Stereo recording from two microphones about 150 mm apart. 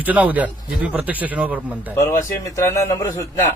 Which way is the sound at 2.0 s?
20° left (ahead or behind).